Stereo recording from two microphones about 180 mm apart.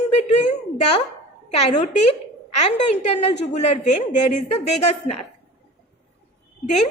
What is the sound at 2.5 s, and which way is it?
A woman's voice, 40° left (ahead or behind).